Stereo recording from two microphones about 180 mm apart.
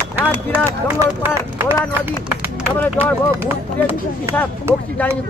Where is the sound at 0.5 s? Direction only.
15° right (ahead or behind).